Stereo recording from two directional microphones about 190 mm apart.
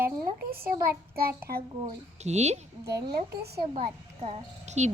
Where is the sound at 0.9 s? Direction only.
50° right (ahead or behind).